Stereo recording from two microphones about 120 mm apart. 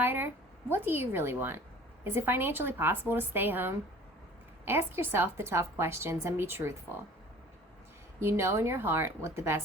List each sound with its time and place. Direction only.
0.0 s a woman's voice: 20° right (ahead or behind)
8.2 s a woman's voice: 20° right (ahead or behind)